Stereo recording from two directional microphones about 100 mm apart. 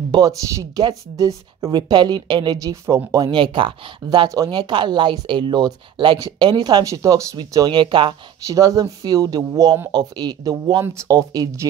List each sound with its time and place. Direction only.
0.1 s a woman's voice: 45° right (ahead or behind)
3.3 s a woman's voice: 55° right (ahead or behind); by 7.2 s 30° right (ahead or behind)
7.5 s a woman's voice: 50° right (ahead or behind)
8.5 s speech: 35° right (ahead or behind)